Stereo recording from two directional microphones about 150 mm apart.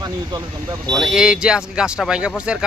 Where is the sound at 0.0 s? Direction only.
25° right (ahead or behind).